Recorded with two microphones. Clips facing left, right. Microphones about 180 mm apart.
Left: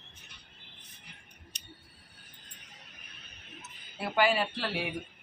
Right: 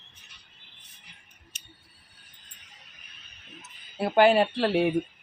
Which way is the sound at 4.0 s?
55° right (ahead or behind).